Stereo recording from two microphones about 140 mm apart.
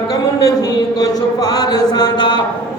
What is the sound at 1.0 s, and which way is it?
Mantra, 25° left (ahead or behind).